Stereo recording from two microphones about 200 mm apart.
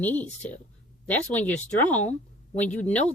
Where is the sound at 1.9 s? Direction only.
35° left (ahead or behind).